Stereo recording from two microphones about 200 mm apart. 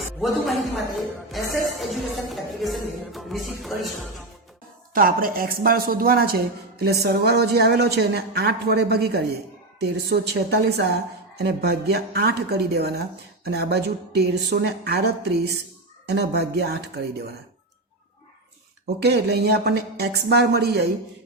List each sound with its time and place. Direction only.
0.0 s speech: centre (ahead or behind)
1.3 s music: centre (ahead or behind)
4.9 s a woman's voice: 45° right (ahead or behind)
18.9 s a woman's voice: 55° right (ahead or behind)